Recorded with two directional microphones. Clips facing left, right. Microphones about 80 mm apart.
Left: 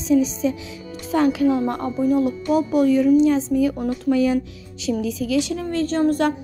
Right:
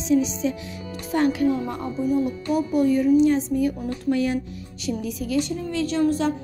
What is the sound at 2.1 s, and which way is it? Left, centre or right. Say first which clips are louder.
Speech: left 4 dB; left.